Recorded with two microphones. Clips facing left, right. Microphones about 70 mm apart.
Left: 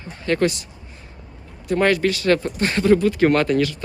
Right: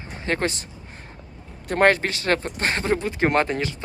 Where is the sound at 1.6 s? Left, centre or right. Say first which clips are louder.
Left 1 dB; right.